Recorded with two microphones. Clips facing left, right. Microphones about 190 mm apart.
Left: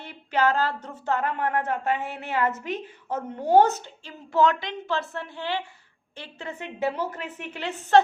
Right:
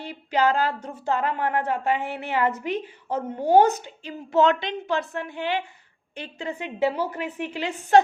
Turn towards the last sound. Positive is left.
turn(degrees=-10)  # may be behind; listen again after turning